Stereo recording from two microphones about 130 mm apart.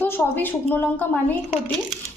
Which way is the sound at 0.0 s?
15° left (ahead or behind).